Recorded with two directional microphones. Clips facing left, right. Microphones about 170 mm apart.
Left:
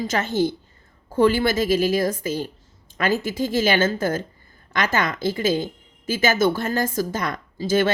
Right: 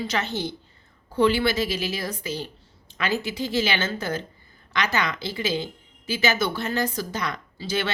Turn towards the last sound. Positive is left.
turn(degrees=45)  # may be behind; listen again after turning